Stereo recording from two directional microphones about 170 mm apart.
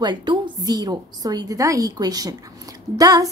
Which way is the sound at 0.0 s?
25° right (ahead or behind).